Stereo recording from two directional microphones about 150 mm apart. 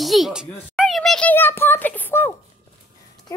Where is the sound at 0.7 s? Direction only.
Centre (ahead or behind).